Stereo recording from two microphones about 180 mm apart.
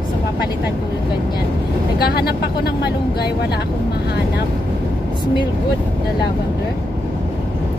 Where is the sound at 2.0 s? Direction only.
60° left (ahead or behind).